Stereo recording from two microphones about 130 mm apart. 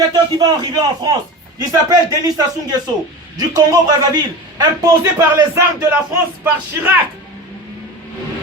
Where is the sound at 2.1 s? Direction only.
30° right (ahead or behind).